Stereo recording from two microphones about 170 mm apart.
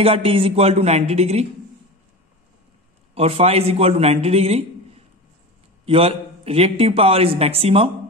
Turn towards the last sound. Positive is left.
turn(degrees=-35)  # may be behind; listen again after turning